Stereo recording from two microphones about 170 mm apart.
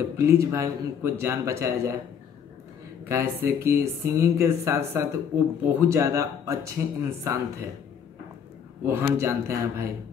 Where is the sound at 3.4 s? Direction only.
15° right (ahead or behind).